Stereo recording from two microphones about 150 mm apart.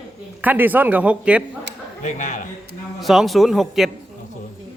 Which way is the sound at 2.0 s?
55° left (ahead or behind).